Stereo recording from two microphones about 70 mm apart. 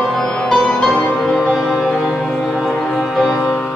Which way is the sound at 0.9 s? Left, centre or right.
Centre.